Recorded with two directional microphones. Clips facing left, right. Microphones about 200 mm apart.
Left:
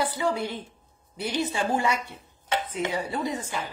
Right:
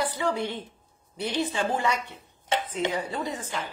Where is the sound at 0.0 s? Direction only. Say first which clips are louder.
Left 1 dB; 10° left (ahead or behind).